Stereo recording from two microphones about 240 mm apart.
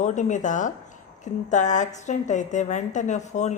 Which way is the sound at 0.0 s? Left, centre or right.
Left.